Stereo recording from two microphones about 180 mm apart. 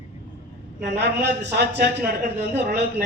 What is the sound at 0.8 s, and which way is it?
A man's voice, 70° right (ahead or behind).